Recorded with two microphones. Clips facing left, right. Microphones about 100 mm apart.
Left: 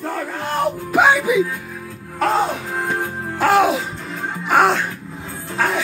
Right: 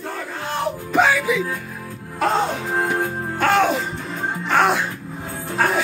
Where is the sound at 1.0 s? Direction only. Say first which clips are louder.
Left 4 dB; 20° left (ahead or behind).